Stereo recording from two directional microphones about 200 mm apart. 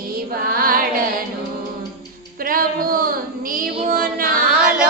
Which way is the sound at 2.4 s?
45° right (ahead or behind).